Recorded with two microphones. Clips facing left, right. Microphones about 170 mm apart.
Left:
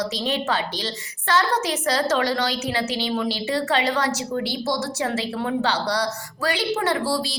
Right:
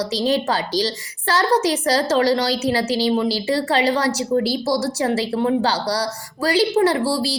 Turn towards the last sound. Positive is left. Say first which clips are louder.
# right 5 dB
turn(degrees=-30)  # may be behind; listen again after turning